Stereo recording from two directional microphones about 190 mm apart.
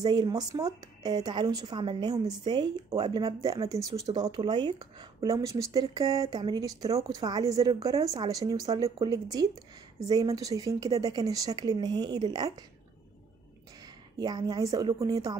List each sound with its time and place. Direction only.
0.0 s speech: 20° right (ahead or behind)
13.8 s speech: 20° right (ahead or behind)